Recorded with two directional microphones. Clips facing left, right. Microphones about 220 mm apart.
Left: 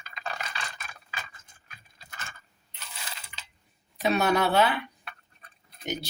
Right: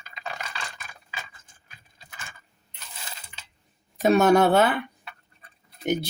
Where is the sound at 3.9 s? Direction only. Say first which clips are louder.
Right 7 dB; 50° right (ahead or behind).